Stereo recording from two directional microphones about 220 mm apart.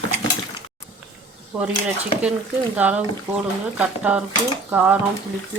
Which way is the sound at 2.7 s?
5° right (ahead or behind).